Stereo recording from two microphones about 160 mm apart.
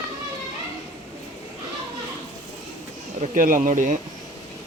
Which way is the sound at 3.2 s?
55° right (ahead or behind).